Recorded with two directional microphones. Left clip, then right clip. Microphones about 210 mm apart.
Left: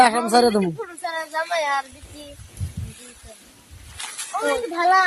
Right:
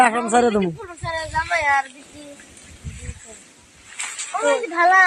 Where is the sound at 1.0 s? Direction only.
55° left (ahead or behind).